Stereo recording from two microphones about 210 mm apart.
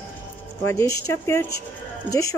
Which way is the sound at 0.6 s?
15° left (ahead or behind).